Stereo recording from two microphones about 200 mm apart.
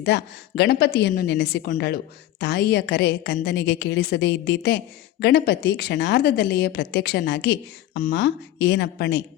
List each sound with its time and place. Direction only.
0.0 s a woman's voice: 60° left (ahead or behind)